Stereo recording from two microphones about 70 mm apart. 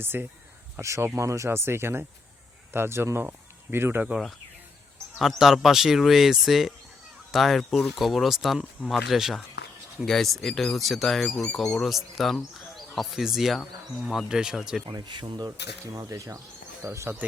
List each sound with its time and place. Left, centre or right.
0.0 s speech: right
5.2 s speech: centre
14.9 s speech: right
16.0 s speech: right